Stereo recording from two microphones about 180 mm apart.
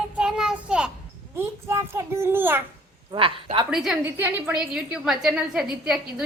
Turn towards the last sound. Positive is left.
turn(degrees=-5)  # may be behind; listen again after turning